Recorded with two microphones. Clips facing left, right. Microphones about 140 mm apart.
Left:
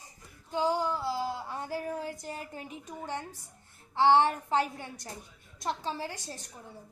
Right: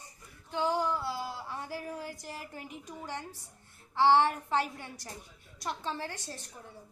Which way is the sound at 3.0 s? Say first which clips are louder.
Left 4 dB; 20° left (ahead or behind).